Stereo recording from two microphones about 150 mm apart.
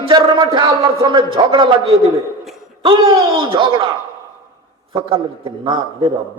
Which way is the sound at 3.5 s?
35° right (ahead or behind).